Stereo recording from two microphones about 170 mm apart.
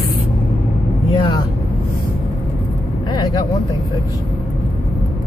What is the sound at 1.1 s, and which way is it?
Vehicle, 25° left (ahead or behind).